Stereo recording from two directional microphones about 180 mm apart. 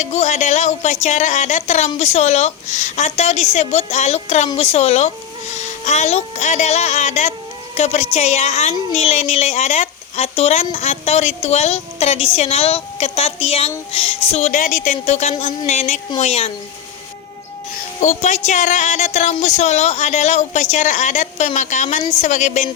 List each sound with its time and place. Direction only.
0.0 s a woman's voice: 40° left (ahead or behind)
18.0 s speech: 40° left (ahead or behind)